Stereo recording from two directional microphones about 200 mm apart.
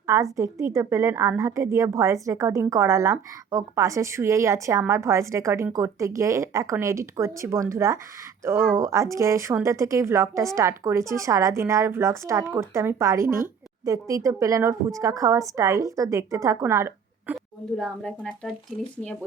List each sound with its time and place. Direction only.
0.1 s a woman's voice: 15° right (ahead or behind)
17.3 s speech: centre (ahead or behind)